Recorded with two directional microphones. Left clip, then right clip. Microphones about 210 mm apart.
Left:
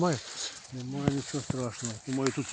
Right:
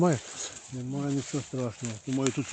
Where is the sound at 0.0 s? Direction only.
55° right (ahead or behind).